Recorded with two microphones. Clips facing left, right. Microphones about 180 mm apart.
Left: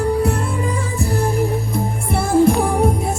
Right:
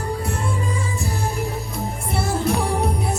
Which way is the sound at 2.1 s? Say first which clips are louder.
Left 8 dB; 50° left (ahead or behind).